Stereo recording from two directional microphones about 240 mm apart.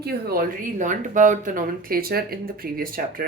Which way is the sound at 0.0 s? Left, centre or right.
Right.